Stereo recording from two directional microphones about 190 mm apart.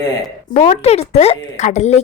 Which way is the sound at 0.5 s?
40° left (ahead or behind).